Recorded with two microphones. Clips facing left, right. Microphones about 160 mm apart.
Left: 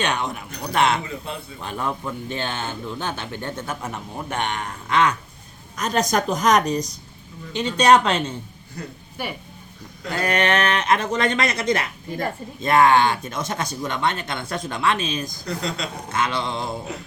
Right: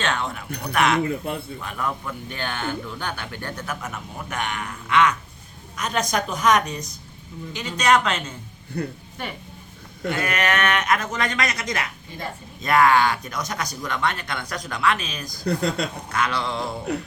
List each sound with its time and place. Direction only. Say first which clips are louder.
0.0 s speech: left 2 dB; 15° left (ahead or behind)
1.0 s speech: right 6 dB; 50° right (ahead or behind)
1.6 s speech: left 4 dB; 30° left (ahead or behind)
8.7 s speech: right 7 dB; 60° right (ahead or behind)
9.2 s speech: left 3 dB; 10° left (ahead or behind)
10.1 s speech: left 3 dB; 35° left (ahead or behind)
15.4 s speech: right 7 dB; 55° right (ahead or behind)
16.1 s speech: left 1 dB; 25° left (ahead or behind)